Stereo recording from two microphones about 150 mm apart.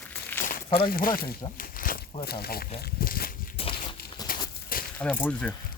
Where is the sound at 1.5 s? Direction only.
70° left (ahead or behind).